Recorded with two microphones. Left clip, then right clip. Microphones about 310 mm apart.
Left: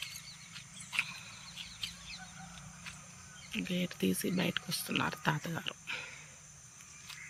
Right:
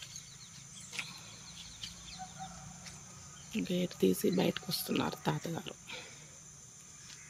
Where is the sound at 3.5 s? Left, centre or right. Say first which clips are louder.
Right 1 dB; centre.